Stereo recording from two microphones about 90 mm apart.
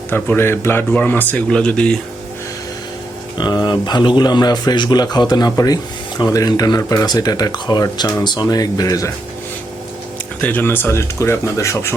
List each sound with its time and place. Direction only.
0.1 s speech: 25° left (ahead or behind)
3.3 s speech: 50° left (ahead or behind)
10.4 s speech: 20° left (ahead or behind)